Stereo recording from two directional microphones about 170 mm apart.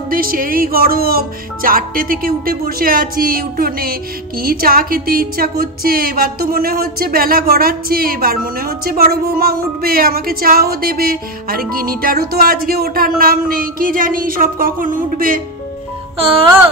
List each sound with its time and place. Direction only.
0.1 s a woman's voice: 55° right (ahead or behind)